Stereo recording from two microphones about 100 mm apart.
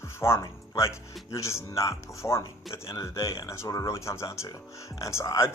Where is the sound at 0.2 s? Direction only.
25° left (ahead or behind).